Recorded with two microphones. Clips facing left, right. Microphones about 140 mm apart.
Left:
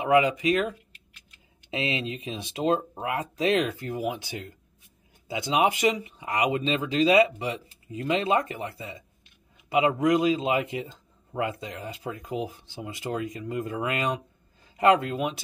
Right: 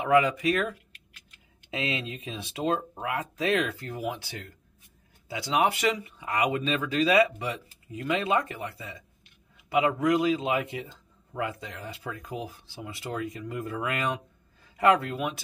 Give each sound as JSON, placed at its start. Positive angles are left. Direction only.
{"t": 0.0, "sound": "a man's voice", "side_deg": 15}